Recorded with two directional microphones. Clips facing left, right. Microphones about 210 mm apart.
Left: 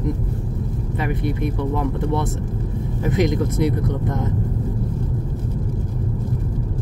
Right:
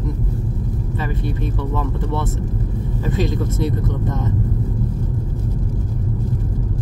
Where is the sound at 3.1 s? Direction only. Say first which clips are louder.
Left 3 dB; 15° left (ahead or behind).